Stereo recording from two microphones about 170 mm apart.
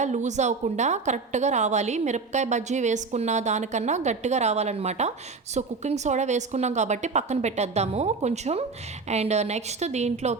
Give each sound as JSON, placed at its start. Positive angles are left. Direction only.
{"t": 0.0, "sound": "a woman's voice", "side_deg": -45}